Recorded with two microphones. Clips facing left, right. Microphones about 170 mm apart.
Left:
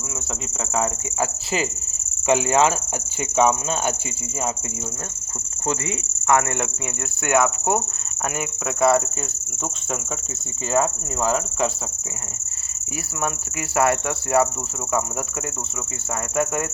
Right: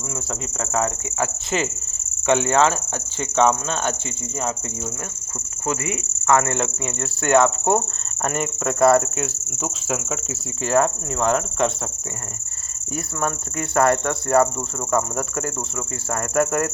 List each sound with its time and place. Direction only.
0.8 s cricket: 10° left (ahead or behind)
6.2 s cricket: 15° left (ahead or behind)
8.4 s speech: centre (ahead or behind)
10.7 s speech: centre (ahead or behind)
13.2 s speech: 5° left (ahead or behind)
16.3 s speech: centre (ahead or behind)